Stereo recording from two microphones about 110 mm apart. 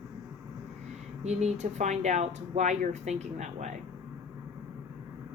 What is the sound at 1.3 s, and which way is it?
Speech, 90° right.